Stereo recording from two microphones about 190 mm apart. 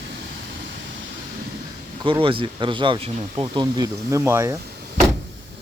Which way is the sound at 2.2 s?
25° right (ahead or behind).